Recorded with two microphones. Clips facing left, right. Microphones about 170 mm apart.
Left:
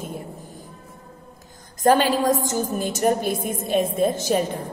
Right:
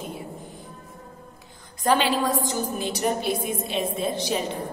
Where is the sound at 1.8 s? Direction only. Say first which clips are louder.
Left 4 dB; 45° left (ahead or behind).